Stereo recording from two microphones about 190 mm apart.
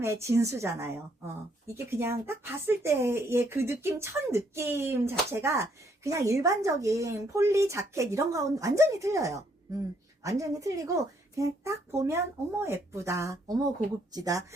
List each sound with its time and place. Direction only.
0.0 s a woman's voice: 15° right (ahead or behind)